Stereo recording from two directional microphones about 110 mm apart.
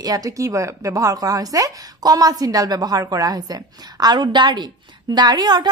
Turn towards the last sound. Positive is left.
turn(degrees=-40)  # may be behind; listen again after turning